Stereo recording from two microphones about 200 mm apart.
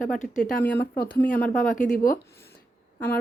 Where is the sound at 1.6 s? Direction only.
40° left (ahead or behind).